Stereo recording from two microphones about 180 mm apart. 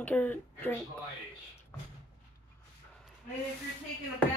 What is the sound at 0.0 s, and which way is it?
Speech, 10° left (ahead or behind).